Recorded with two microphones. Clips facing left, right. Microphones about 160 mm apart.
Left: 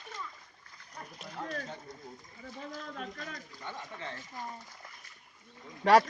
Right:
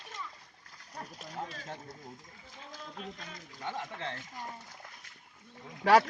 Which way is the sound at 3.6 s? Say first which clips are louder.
Right 5 dB; 85° right.